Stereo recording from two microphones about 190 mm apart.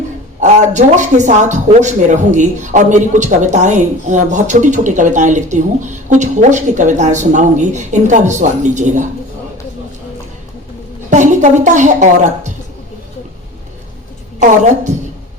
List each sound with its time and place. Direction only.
0.3 s speech: 40° right (ahead or behind)
11.1 s speech: 40° right (ahead or behind)
14.3 s speech: 40° right (ahead or behind)